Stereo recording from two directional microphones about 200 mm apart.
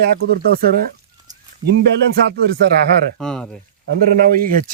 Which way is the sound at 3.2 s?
5° left (ahead or behind).